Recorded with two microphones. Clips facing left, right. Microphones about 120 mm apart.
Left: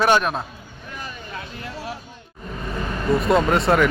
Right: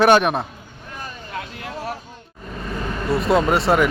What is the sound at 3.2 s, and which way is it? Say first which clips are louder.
Speech: right 2 dB; centre (ahead or behind).